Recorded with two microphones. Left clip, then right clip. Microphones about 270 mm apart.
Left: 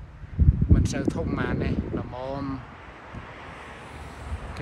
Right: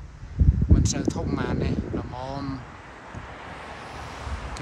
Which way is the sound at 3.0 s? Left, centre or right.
Right.